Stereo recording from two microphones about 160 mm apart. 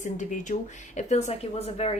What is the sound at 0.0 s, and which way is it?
A woman's voice, 50° left (ahead or behind).